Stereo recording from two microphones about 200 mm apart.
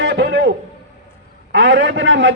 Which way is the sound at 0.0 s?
60° right (ahead or behind).